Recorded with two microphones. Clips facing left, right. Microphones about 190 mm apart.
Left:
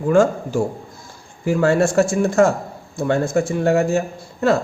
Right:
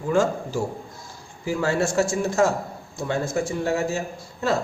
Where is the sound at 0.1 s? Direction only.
55° left (ahead or behind).